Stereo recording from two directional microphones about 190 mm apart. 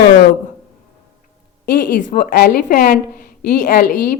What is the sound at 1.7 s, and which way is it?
A woman's voice, 45° left (ahead or behind).